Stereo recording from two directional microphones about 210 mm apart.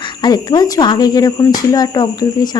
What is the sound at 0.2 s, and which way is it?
Speech, 20° left (ahead or behind).